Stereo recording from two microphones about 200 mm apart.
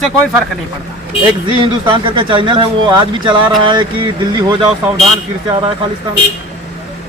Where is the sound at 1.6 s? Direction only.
25° right (ahead or behind).